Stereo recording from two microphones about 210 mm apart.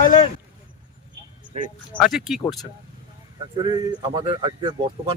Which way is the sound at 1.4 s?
30° right (ahead or behind).